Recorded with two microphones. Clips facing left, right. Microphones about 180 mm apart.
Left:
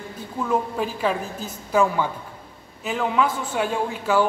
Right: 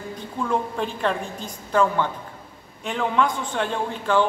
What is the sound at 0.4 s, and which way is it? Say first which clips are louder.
A man's voice: left 1 dB; 5° left (ahead or behind).